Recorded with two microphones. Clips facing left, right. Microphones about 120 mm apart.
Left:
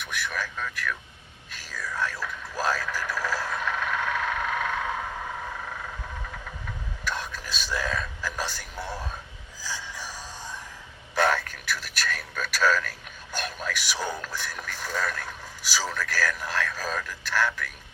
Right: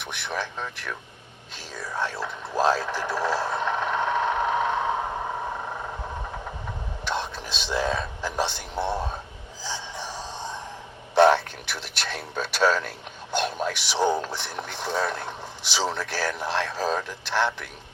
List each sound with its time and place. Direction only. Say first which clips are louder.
0.0 s speech: right 1 dB; 25° right (ahead or behind)
1.5 s a sound: right 2 dB; 25° right (ahead or behind)
9.6 s music: right 3 dB; 25° right (ahead or behind)
11.1 s speech: right 7 dB; 25° right (ahead or behind)